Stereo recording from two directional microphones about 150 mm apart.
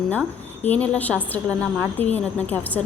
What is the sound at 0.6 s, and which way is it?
A woman's voice, 10° left (ahead or behind).